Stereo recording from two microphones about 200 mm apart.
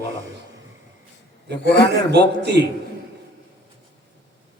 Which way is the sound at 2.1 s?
55° right (ahead or behind).